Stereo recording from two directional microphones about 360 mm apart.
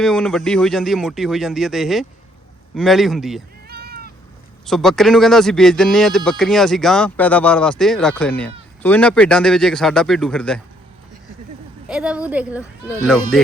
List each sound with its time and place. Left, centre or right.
0.0 s speech: centre
3.7 s cat: right
4.6 s speech: centre
11.9 s speech: centre